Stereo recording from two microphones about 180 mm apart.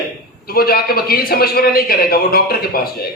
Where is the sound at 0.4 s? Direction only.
55° left (ahead or behind).